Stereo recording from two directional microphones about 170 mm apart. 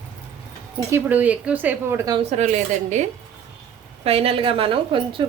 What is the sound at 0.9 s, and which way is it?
Speech, 10° right (ahead or behind).